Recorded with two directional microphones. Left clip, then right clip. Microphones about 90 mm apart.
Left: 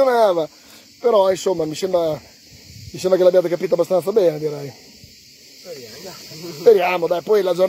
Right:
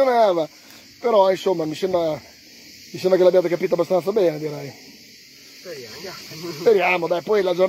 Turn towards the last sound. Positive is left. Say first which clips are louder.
# left 2 dB
turn(degrees=35)  # may be behind; listen again after turning